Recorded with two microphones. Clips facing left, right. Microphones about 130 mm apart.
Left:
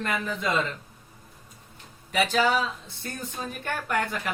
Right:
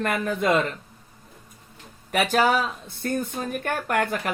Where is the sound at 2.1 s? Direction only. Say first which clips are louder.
Right 3 dB; 55° right (ahead or behind).